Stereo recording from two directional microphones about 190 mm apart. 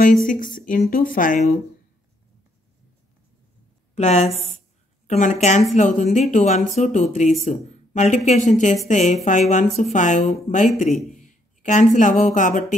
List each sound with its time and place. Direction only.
0.3 s speech: 45° left (ahead or behind)
3.9 s a woman's voice: 35° left (ahead or behind)